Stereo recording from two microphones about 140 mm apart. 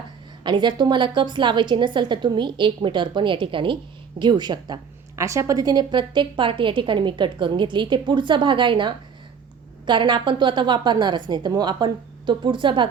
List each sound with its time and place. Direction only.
0.4 s a woman's voice: 35° right (ahead or behind)